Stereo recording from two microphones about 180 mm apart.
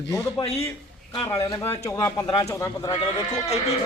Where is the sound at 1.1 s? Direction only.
20° left (ahead or behind).